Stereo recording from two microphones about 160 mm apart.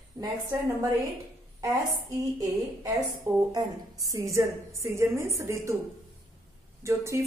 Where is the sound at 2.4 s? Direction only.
20° right (ahead or behind).